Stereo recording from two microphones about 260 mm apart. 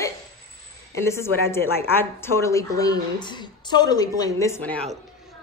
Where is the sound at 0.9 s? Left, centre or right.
Centre.